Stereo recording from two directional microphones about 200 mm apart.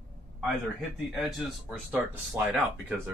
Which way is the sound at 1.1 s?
Centre (ahead or behind).